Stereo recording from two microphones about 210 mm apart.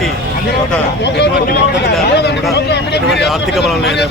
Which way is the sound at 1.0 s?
50° left (ahead or behind).